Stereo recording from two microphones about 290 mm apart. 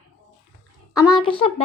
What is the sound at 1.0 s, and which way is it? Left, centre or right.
Speech, centre.